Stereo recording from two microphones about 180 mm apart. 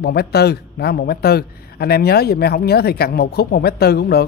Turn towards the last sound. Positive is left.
turn(degrees=60)  # may be behind; listen again after turning